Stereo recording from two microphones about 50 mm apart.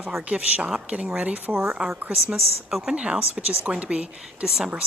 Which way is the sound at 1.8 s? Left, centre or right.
Centre.